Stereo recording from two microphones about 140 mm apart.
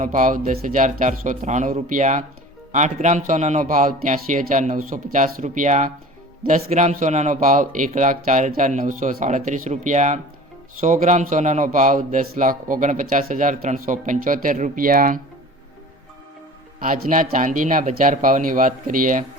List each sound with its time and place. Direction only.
0.0 s speech: 65° right (ahead or behind)
7.3 s speech: 70° right (ahead or behind); by 15.2 s 85° right
16.8 s speech: 70° right (ahead or behind)